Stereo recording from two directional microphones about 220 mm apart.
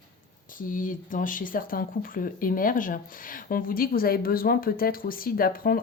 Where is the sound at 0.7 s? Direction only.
40° left (ahead or behind).